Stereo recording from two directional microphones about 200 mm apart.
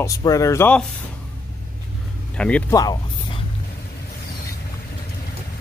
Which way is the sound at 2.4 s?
5° left (ahead or behind).